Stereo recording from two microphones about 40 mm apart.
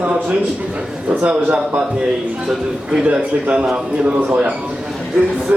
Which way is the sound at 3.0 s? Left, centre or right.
Right.